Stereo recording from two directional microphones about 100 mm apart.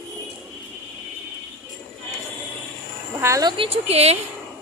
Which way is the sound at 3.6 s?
90° right.